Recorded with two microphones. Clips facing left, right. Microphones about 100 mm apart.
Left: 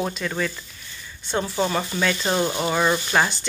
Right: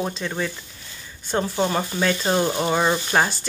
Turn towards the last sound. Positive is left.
turn(degrees=-30)  # may be behind; listen again after turning